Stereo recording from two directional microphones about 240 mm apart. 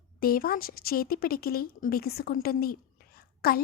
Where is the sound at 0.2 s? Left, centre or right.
Left.